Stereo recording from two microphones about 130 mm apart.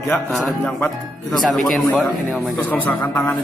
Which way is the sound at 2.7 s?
15° left (ahead or behind).